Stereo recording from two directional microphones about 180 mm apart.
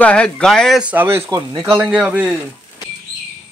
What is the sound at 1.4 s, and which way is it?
Speech, 25° right (ahead or behind).